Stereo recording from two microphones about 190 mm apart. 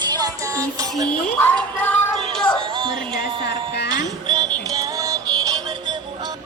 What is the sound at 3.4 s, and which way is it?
Music, 65° left (ahead or behind).